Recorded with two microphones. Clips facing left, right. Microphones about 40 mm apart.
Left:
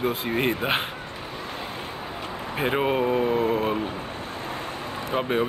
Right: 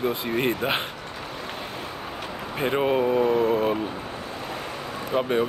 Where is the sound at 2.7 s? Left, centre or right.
Centre.